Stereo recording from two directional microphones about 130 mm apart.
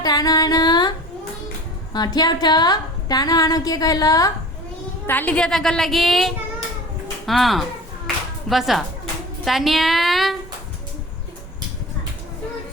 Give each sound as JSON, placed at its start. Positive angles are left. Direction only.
{"t": 0.0, "sound": "singing", "side_deg": 30}
{"t": 1.9, "sound": "a woman's voice", "side_deg": 30}
{"t": 5.0, "sound": "a woman's voice", "side_deg": 15}
{"t": 8.0, "sound": "music", "side_deg": 0}
{"t": 9.4, "sound": "a woman's voice", "side_deg": 0}